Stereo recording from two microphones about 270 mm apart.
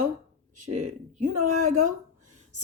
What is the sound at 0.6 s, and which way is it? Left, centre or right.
Speech, right.